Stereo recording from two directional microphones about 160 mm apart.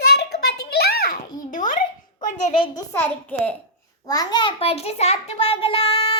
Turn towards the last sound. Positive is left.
turn(degrees=35)  # may be behind; listen again after turning